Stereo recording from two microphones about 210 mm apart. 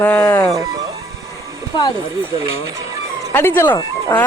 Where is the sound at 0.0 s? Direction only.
10° left (ahead or behind).